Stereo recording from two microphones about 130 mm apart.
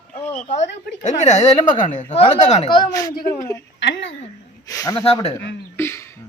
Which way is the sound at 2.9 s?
25° left (ahead or behind).